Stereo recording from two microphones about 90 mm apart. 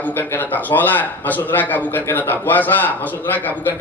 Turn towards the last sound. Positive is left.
turn(degrees=20)  # may be behind; listen again after turning